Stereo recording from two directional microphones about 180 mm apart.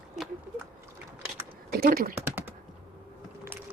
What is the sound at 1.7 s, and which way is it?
Speech, 55° right (ahead or behind).